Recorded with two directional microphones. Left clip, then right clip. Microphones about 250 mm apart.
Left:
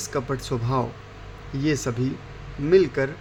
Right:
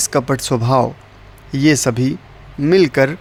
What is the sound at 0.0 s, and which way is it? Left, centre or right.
Speech, right.